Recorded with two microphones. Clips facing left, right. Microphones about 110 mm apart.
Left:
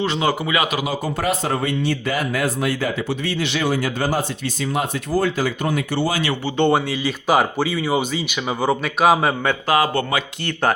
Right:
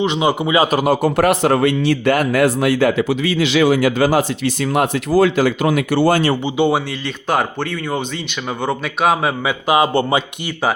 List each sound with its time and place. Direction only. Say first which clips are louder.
0.0 s speech: right 4 dB; 20° right (ahead or behind)
0.7 s a man's voice: right 8 dB; 50° right (ahead or behind)
1.0 s a man's voice: right 8 dB; 70° right (ahead or behind)
6.6 s speech: left 2 dB; centre (ahead or behind)
9.6 s speech: right 5 dB; 20° right (ahead or behind)